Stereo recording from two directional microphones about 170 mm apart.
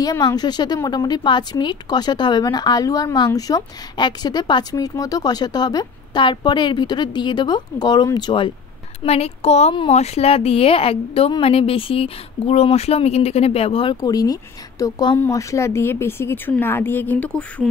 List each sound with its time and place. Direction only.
0.0 s speech: 20° left (ahead or behind)
9.0 s speech: 35° left (ahead or behind); by 17.6 s 5° left (ahead or behind)